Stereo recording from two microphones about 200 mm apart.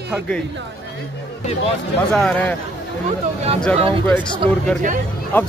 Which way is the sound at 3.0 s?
30° right (ahead or behind).